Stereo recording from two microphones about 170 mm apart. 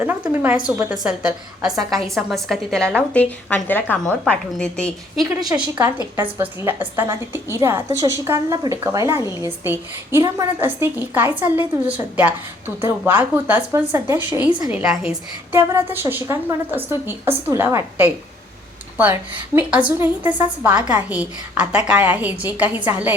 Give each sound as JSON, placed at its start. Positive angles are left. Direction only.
{"t": 0.0, "sound": "a woman's voice", "side_deg": -10}
{"t": 5.5, "sound": "a woman's voice", "side_deg": -15}